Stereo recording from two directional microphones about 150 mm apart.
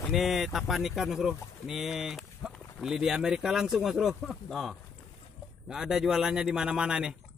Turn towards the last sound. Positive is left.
turn(degrees=-5)  # may be behind; listen again after turning